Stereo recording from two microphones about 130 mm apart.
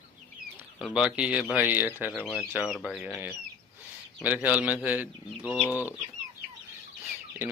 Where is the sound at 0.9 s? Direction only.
10° right (ahead or behind).